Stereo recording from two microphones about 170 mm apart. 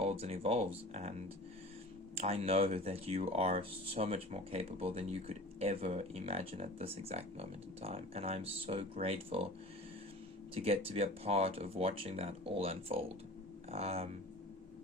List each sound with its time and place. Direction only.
0.0 s speech: 40° right (ahead or behind)
2.1 s speech: 40° right (ahead or behind)
10.5 s speech: 35° right (ahead or behind)